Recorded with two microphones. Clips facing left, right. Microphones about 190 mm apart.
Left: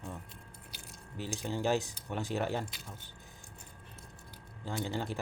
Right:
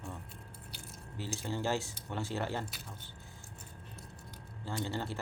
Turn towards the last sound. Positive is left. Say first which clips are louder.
# left 1 dB
turn(degrees=15)  # may be behind; listen again after turning